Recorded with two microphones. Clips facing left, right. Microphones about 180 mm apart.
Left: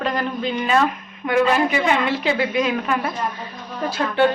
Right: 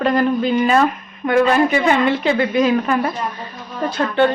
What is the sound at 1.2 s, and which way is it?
A woman's voice, centre (ahead or behind).